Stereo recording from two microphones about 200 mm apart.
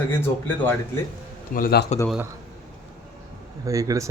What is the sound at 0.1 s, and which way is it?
Speech, 10° left (ahead or behind).